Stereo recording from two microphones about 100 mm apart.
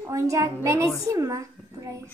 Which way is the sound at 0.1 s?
30° right (ahead or behind).